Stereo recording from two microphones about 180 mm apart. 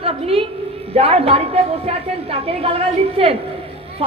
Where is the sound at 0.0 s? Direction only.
35° right (ahead or behind).